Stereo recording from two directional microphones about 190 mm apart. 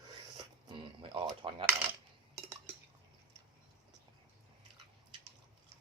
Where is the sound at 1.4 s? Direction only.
30° right (ahead or behind).